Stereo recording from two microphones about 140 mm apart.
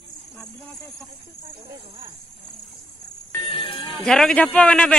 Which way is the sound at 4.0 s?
5° left (ahead or behind).